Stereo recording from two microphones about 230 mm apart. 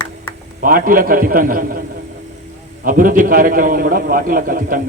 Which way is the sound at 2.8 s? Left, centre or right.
Right.